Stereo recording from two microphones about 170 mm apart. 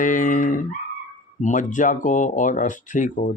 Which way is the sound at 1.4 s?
50° left (ahead or behind).